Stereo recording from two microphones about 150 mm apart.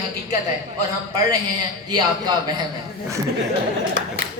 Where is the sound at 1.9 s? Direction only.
30° right (ahead or behind).